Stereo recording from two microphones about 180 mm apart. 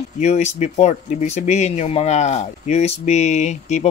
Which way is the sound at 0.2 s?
40° left (ahead or behind).